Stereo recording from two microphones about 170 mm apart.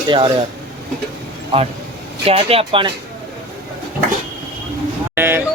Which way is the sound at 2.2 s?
35° right (ahead or behind).